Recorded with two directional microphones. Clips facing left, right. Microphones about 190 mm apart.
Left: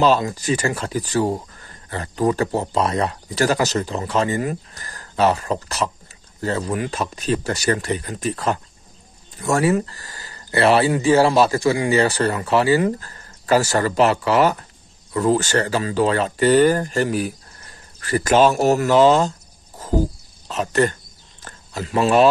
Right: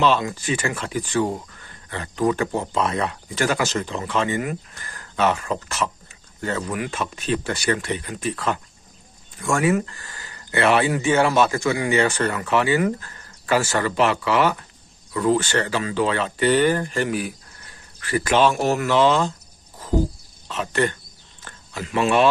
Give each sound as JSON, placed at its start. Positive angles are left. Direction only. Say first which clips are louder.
{"t": 0.0, "sound": "speech", "louder": "left 3 dB", "side_deg": 40}
{"t": 20.4, "sound": "speech", "louder": "left 4 dB", "side_deg": 40}
{"t": 21.4, "sound": "a sound", "louder": "left 3 dB", "side_deg": 40}